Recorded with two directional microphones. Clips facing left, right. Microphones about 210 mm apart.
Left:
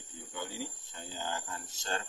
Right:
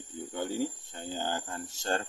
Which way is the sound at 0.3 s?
50° right (ahead or behind).